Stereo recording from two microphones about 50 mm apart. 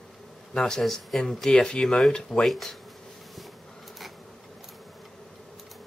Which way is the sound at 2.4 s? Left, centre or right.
Centre.